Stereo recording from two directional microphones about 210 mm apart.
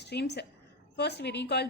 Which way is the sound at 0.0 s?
50° left (ahead or behind).